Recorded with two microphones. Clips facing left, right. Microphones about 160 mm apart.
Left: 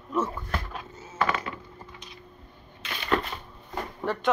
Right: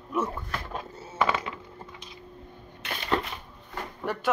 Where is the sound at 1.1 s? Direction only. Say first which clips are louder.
Right 1 dB; 15° right (ahead or behind).